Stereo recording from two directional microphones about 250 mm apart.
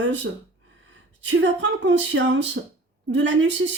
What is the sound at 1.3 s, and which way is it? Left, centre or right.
Speech, right.